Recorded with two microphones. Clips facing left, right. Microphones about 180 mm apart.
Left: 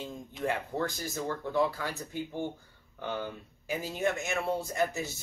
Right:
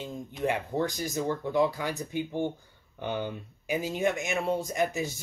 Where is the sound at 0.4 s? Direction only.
15° right (ahead or behind).